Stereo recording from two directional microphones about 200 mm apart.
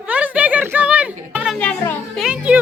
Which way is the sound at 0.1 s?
5° right (ahead or behind).